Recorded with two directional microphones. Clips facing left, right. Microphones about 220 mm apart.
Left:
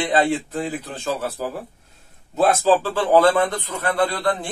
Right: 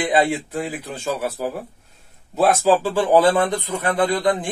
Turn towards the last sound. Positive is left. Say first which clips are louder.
# right 2 dB
turn(degrees=-15)  # may be behind; listen again after turning